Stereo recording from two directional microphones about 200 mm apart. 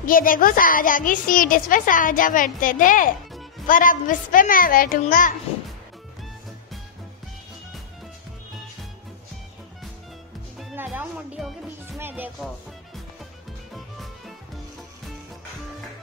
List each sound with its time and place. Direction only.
0.0 s a woman's voice: 45° left (ahead or behind)
10.6 s music: 5° right (ahead or behind)
12.0 s speech: 10° right (ahead or behind)